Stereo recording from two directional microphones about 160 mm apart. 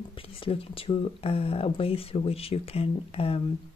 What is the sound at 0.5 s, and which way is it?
Speech, 35° left (ahead or behind).